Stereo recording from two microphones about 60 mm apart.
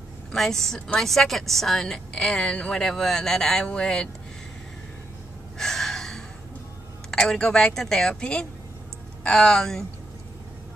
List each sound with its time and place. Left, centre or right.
0.3 s a woman's voice: centre
2.1 s speech: centre
5.6 s gasp: centre
7.1 s a woman's voice: centre